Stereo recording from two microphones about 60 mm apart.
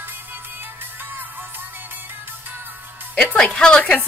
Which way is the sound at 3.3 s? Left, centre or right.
Centre.